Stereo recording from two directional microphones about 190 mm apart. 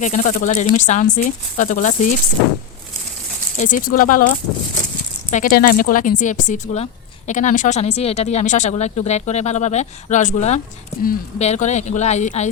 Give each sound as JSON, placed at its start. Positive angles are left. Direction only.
{"t": 0.0, "sound": "speech", "side_deg": 40}
{"t": 3.6, "sound": "a woman's voice", "side_deg": 45}